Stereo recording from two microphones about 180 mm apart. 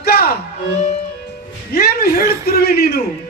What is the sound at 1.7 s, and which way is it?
A man's voice, 55° left (ahead or behind).